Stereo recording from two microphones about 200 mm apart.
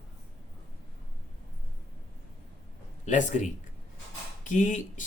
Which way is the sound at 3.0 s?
40° left (ahead or behind).